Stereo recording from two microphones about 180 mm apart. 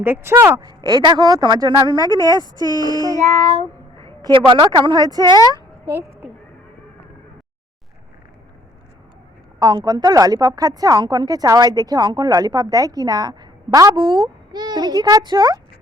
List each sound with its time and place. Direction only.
0.0 s a woman's voice: 10° right (ahead or behind)
3.2 s child singing: 35° right (ahead or behind)
4.4 s a woman's voice: 25° right (ahead or behind); by 6.2 s 10° right (ahead or behind)
9.6 s a woman's voice: 20° right (ahead or behind)